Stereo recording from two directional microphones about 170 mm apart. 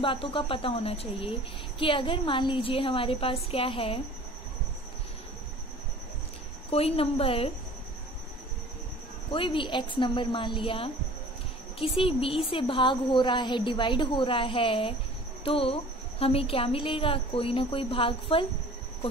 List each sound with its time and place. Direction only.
0.0 s a woman's voice: 30° left (ahead or behind)
6.7 s a woman's voice: 35° left (ahead or behind)
9.3 s a woman's voice: 30° left (ahead or behind)